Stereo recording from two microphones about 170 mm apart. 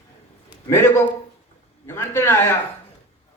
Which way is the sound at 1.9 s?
15° left (ahead or behind).